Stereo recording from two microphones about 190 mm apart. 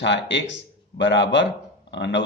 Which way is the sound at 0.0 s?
65° left (ahead or behind).